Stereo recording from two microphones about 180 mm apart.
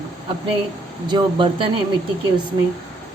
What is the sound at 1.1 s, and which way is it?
Speech, 25° right (ahead or behind).